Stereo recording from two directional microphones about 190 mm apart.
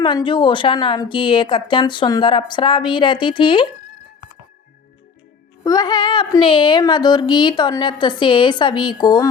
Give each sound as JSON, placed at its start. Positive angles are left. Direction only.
{"t": 0.0, "sound": "speech", "side_deg": 25}
{"t": 5.6, "sound": "speech", "side_deg": 20}